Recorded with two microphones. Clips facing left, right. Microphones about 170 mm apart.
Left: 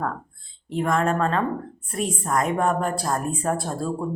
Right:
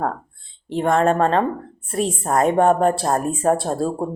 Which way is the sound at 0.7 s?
30° right (ahead or behind).